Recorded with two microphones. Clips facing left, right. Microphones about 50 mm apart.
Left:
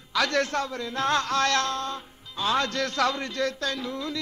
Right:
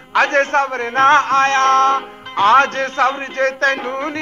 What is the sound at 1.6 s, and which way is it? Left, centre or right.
Music, right.